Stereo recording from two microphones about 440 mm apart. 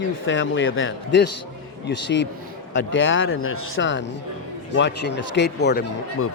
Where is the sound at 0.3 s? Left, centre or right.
Left.